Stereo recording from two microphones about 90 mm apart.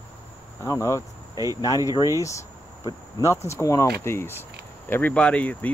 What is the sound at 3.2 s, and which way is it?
Speech, 35° left (ahead or behind).